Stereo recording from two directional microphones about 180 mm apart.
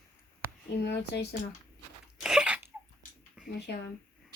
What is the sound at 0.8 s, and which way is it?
Speech, 65° left (ahead or behind).